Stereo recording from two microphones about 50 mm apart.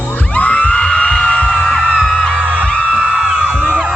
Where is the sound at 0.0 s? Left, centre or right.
Left.